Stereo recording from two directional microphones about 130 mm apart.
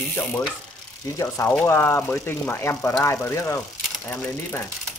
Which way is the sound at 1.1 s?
25° left (ahead or behind).